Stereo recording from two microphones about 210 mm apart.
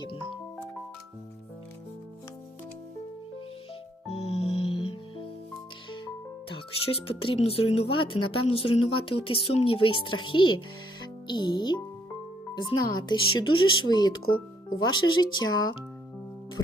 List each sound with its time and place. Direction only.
4.3 s music: 30° left (ahead or behind)
6.5 s a child's voice: 25° left (ahead or behind)